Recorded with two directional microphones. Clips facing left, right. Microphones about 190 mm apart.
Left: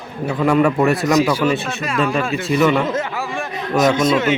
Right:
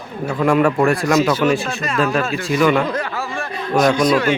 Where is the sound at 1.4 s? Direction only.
Centre (ahead or behind).